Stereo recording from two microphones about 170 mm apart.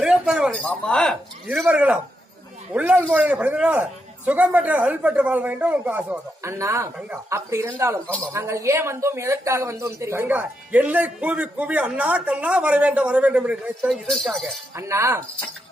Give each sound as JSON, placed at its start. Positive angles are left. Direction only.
{"t": 0.0, "sound": "a man's voice", "side_deg": 0}
{"t": 14.8, "sound": "speech", "side_deg": -15}